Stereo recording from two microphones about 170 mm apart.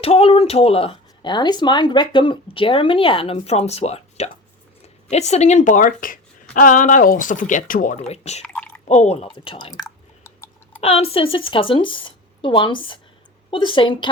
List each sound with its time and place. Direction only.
0.0 s speech: 35° left (ahead or behind); by 7.9 s 50° left (ahead or behind)
8.1 s speech: 40° left (ahead or behind)
8.5 s drip: 10° left (ahead or behind)
8.9 s a sound: 40° left (ahead or behind); by 10.8 s 15° left (ahead or behind)
10.8 s speech: 35° left (ahead or behind)